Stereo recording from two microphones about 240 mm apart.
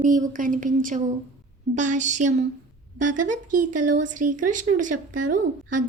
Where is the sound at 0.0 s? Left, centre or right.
Right.